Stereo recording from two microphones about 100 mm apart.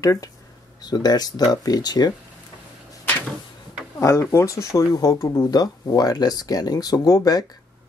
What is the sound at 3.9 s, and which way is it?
Speech, 25° left (ahead or behind).